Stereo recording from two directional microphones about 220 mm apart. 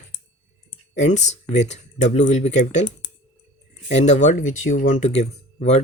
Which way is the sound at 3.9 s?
30° left (ahead or behind).